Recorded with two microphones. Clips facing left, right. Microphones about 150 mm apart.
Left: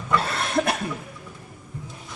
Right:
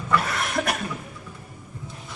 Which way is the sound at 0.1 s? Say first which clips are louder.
Left 1 dB; 25° left (ahead or behind).